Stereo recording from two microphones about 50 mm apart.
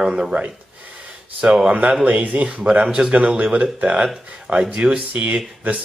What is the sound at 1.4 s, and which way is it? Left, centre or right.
Speech, centre.